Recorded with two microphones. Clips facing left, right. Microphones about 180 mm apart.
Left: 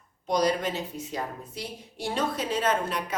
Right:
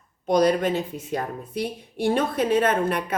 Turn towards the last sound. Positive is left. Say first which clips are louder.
# right 5 dB
turn(degrees=-55)  # may be behind; listen again after turning